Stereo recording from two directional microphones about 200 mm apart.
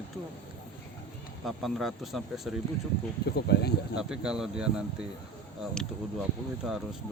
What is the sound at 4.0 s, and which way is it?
Speech, 5° right (ahead or behind).